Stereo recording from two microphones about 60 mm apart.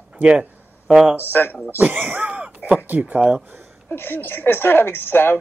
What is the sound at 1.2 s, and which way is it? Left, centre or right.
Speech, left.